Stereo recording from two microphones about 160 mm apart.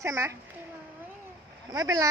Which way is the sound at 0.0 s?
15° right (ahead or behind).